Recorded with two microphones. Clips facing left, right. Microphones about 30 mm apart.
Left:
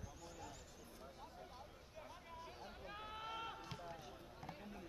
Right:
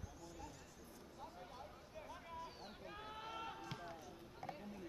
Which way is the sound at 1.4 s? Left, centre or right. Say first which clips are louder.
Right 2 dB; centre.